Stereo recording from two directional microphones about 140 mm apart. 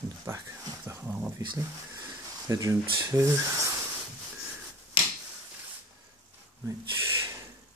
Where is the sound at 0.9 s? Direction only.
15° right (ahead or behind).